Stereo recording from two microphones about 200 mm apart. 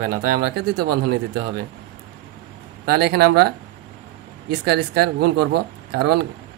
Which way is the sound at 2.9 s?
55° right (ahead or behind).